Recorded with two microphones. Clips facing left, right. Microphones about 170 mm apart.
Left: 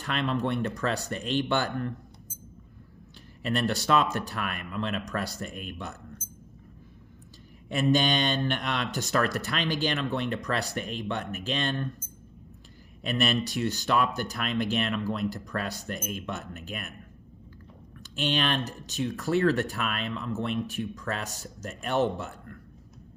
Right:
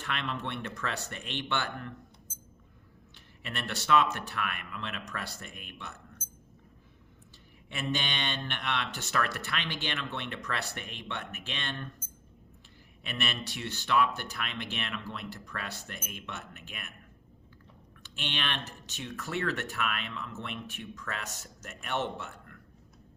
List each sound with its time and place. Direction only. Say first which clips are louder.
0.0 s speech: left 7 dB; 35° left (ahead or behind)
3.4 s speech: left 9 dB; 35° left (ahead or behind)
7.7 s speech: left 10 dB; 40° left (ahead or behind)
13.0 s speech: left 9 dB; 40° left (ahead or behind)
18.0 s speech: left 9 dB; 40° left (ahead or behind)